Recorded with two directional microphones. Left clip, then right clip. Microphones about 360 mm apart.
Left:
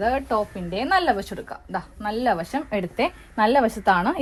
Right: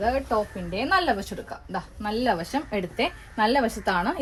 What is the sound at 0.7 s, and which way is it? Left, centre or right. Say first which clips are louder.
A woman's voice: left 2 dB; centre.